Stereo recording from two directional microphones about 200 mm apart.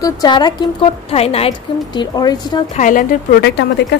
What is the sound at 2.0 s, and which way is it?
Speech, 20° left (ahead or behind).